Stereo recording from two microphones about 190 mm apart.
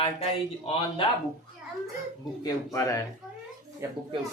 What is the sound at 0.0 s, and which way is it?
Speech, 30° left (ahead or behind).